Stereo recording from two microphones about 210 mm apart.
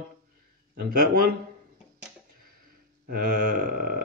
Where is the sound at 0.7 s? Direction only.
45° right (ahead or behind).